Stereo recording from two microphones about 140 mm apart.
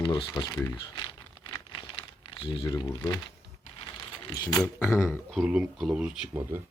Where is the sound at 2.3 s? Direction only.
35° left (ahead or behind).